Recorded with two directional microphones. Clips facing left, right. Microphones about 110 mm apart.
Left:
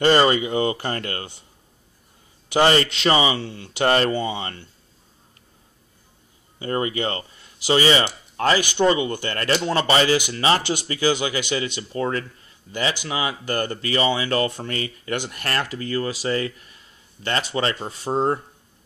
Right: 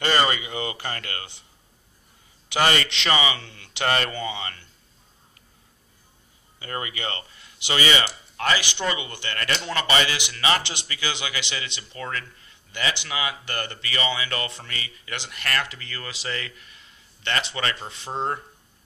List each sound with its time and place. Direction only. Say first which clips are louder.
0.0 s speech: left 6 dB; 35° left (ahead or behind)
2.5 s speech: left 5 dB; 35° left (ahead or behind)
6.6 s speech: left 8 dB; 35° left (ahead or behind)